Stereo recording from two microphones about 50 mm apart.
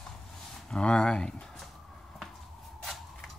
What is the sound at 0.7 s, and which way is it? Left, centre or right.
Speech, centre.